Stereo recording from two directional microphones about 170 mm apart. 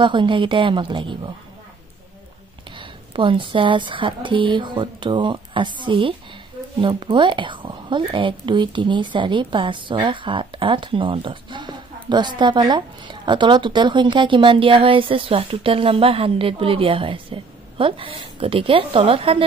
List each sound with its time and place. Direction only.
0.0 s a woman's voice: 30° right (ahead or behind)
2.8 s a woman's voice: 30° right (ahead or behind)